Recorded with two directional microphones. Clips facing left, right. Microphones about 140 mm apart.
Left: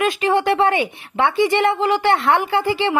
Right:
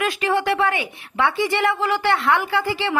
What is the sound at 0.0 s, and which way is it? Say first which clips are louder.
A woman's voice: left 3 dB; 25° left (ahead or behind).